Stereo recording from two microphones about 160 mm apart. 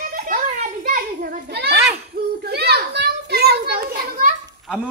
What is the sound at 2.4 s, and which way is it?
Children playing, 90° right.